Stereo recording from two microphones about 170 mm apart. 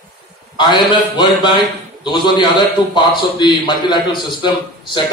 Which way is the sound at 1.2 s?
25° left (ahead or behind).